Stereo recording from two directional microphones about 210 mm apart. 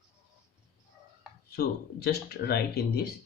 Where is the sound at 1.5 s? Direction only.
50° left (ahead or behind).